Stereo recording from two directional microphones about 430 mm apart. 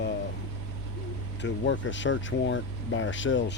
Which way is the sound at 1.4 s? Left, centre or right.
Left.